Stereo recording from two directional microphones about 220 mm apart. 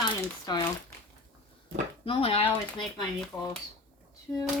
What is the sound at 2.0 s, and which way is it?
Speech, 25° left (ahead or behind).